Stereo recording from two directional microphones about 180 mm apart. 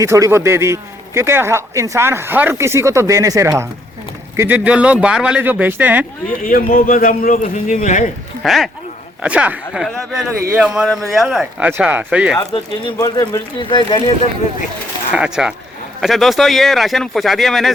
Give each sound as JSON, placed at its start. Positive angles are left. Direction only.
{"t": 0.0, "sound": "a man's voice", "side_deg": -15}
{"t": 6.4, "sound": "a man's voice", "side_deg": 50}
{"t": 8.4, "sound": "a man's voice", "side_deg": 0}
{"t": 13.0, "sound": "speech", "side_deg": 20}
{"t": 15.1, "sound": "speech", "side_deg": -5}